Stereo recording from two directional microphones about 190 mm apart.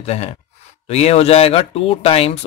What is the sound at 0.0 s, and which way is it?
Speech, 35° left (ahead or behind).